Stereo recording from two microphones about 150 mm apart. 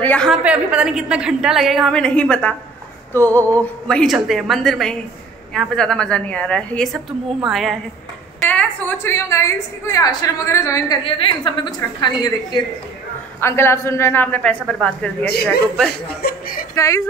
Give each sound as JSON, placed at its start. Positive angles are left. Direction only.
{"t": 0.0, "sound": "a woman's voice", "side_deg": 10}
{"t": 0.3, "sound": "a woman's voice", "side_deg": -10}
{"t": 3.1, "sound": "a sound", "side_deg": 15}
{"t": 3.8, "sound": "a woman's voice", "side_deg": 5}
{"t": 8.5, "sound": "a woman's voice", "side_deg": 10}
{"t": 11.1, "sound": "a woman's voice", "side_deg": 35}
{"t": 13.4, "sound": "a woman's voice", "side_deg": 15}
{"t": 16.2, "sound": "speech", "side_deg": 80}
{"t": 16.7, "sound": "a woman's voice", "side_deg": 20}